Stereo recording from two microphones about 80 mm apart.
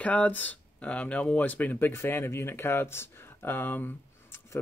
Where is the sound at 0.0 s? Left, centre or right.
Centre.